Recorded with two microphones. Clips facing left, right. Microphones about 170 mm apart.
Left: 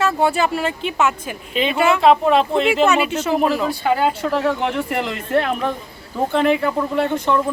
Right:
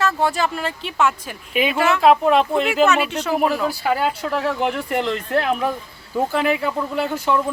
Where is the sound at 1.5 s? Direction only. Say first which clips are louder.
Left 1 dB; 5° right (ahead or behind).